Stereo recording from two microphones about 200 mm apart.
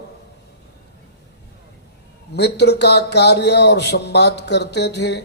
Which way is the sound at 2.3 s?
55° left (ahead or behind).